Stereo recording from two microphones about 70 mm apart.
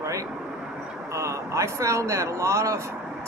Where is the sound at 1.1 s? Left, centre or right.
Right.